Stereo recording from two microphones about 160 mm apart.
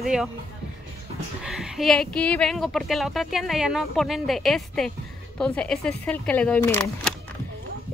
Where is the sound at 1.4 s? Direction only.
5° right (ahead or behind).